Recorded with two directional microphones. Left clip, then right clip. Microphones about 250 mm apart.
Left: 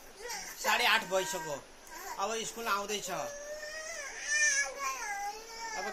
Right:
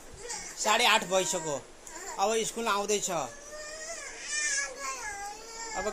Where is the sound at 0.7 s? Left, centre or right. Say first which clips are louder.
Right 4 dB; right.